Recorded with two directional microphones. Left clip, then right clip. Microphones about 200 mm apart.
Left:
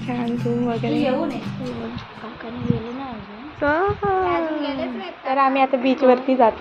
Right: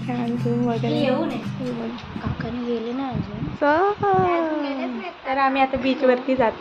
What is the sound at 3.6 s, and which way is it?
Speech, 10° right (ahead or behind).